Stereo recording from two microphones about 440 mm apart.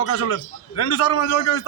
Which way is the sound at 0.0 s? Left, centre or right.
Left.